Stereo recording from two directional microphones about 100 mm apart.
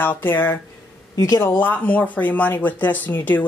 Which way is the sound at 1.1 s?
30° left (ahead or behind).